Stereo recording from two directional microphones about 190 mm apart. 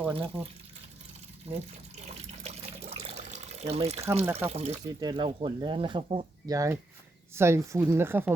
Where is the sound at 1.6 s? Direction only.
35° right (ahead or behind).